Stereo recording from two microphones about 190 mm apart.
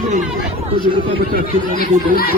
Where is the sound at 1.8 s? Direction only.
50° left (ahead or behind).